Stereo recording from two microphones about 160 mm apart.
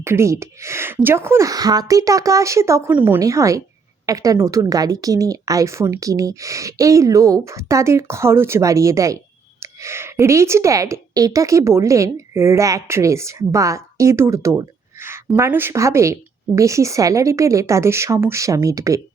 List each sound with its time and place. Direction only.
0.0 s a woman's voice: 15° right (ahead or behind)